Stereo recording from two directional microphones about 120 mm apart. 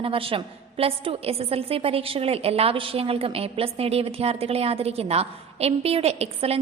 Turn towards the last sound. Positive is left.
turn(degrees=-60)  # may be behind; listen again after turning